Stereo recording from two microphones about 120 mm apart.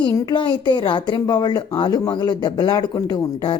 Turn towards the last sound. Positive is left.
turn(degrees=40)  # may be behind; listen again after turning